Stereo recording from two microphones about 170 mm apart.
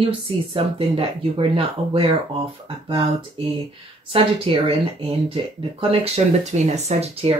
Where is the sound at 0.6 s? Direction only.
35° right (ahead or behind).